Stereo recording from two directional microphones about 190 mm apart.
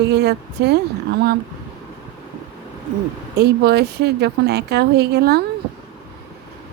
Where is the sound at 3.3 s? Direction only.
60° right (ahead or behind).